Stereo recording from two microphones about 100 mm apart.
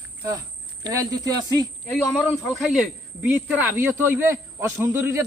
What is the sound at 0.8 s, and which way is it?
Speech, 40° right (ahead or behind).